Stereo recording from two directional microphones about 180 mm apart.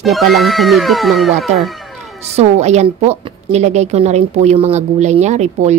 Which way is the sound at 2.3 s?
40° right (ahead or behind).